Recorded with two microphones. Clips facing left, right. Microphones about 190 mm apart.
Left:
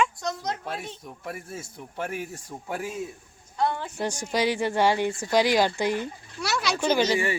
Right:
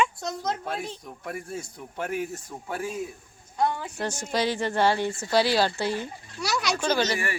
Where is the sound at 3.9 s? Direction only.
10° left (ahead or behind).